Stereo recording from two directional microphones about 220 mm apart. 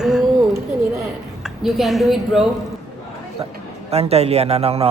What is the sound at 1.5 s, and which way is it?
A woman's voice, centre (ahead or behind).